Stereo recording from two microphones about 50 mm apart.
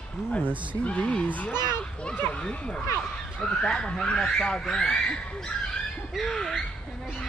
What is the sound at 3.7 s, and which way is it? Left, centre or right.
Speech, centre.